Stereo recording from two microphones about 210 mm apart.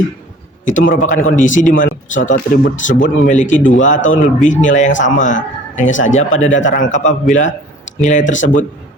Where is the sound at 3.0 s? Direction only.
35° left (ahead or behind).